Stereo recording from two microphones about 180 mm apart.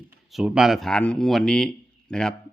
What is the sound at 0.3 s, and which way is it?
A man's voice, 5° right (ahead or behind).